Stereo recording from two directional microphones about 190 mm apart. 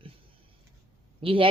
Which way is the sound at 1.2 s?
30° right (ahead or behind).